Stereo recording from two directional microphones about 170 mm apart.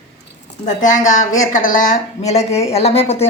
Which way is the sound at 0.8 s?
45° left (ahead or behind).